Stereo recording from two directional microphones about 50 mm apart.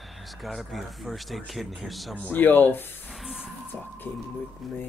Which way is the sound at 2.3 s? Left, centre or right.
Left.